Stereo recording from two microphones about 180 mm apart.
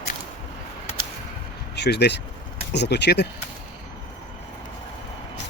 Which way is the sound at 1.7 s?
70° left (ahead or behind).